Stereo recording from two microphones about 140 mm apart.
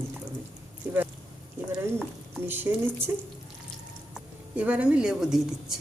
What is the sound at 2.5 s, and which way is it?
Speech, 15° right (ahead or behind).